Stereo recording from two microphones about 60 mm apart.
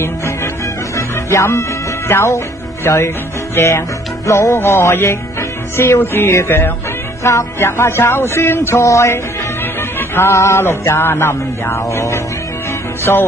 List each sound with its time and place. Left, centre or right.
0.9 s music: left
4.6 s music: left
8.7 s music: left
9.9 s music: left
10.3 s music: left
10.6 s music: left